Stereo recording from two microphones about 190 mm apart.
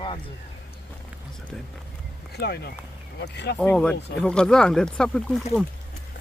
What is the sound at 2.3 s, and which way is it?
Speech, 60° left (ahead or behind).